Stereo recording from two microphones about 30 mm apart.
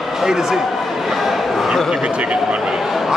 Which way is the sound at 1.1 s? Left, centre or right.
Centre.